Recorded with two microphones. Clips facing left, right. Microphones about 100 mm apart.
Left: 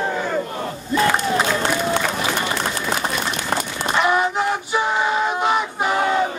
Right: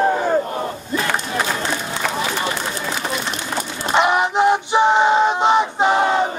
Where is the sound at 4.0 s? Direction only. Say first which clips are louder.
Right 3 dB; 20° right (ahead or behind).